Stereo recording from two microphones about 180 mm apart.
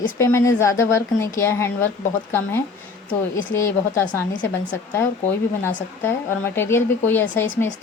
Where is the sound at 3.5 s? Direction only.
15° left (ahead or behind).